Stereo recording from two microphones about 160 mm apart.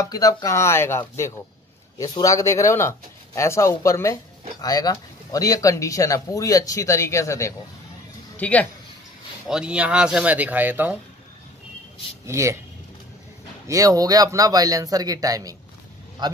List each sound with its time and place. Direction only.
0.0 s speech: 25° left (ahead or behind)
9.5 s speech: 5° right (ahead or behind)
12.3 s speech: 20° right (ahead or behind)
13.7 s speech: 20° right (ahead or behind)